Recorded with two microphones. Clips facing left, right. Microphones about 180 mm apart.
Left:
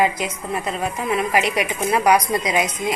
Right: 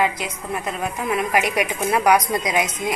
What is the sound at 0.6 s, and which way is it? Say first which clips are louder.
A woman's voice: left 1 dB; centre (ahead or behind).